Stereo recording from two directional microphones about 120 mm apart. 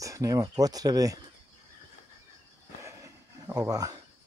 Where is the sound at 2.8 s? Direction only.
25° right (ahead or behind).